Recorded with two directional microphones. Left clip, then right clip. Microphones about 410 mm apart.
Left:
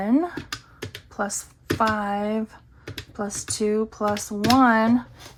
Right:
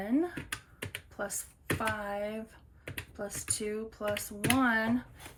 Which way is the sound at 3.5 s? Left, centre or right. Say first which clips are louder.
Left 15 dB; centre.